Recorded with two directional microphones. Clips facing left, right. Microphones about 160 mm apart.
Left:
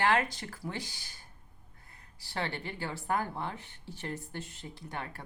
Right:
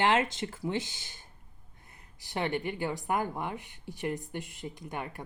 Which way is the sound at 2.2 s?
20° right (ahead or behind).